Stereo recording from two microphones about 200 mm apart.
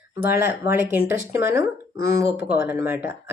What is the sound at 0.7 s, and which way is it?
Speech, 10° right (ahead or behind).